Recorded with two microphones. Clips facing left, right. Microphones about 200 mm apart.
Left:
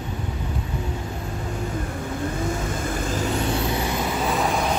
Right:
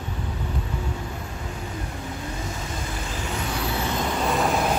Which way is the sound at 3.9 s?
Centre (ahead or behind).